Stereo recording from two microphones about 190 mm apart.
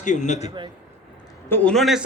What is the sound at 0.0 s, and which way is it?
Speech, 40° left (ahead or behind).